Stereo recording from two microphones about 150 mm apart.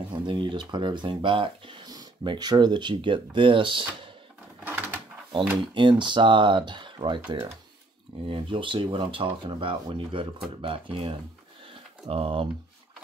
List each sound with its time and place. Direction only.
0.1 s speech: 35° right (ahead or behind)
4.6 s a sound: 10° right (ahead or behind)
5.8 s speech: 30° right (ahead or behind)